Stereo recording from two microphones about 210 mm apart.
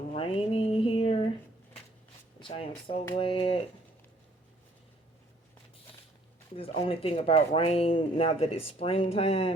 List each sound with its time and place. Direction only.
0.1 s a sound: 25° left (ahead or behind)
2.4 s speech: 25° left (ahead or behind)
6.6 s speech: 25° left (ahead or behind)